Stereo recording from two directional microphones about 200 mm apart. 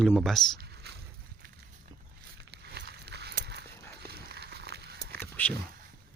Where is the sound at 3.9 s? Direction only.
50° right (ahead or behind).